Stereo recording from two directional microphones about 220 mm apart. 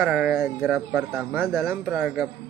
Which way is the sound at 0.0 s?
5° right (ahead or behind).